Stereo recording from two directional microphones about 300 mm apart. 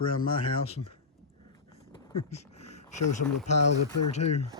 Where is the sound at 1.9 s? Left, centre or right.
Centre.